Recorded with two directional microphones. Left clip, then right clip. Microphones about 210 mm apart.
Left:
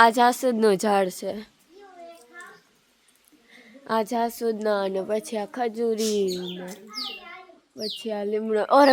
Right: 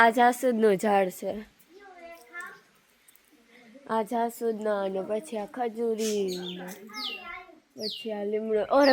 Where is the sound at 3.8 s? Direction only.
15° left (ahead or behind).